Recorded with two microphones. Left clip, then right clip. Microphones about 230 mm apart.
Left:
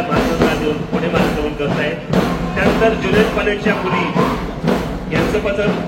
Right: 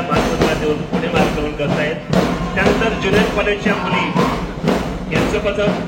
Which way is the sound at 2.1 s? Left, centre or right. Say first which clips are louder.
Even; right.